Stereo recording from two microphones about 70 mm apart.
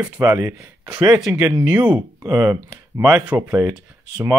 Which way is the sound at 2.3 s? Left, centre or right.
Right.